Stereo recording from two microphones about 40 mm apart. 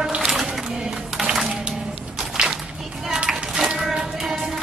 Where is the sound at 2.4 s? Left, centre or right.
Centre.